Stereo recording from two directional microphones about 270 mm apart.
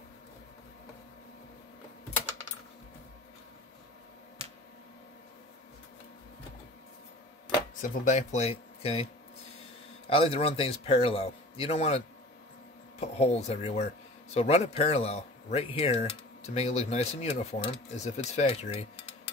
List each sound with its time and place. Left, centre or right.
7.8 s speech: left
10.0 s speech: left
13.0 s speech: left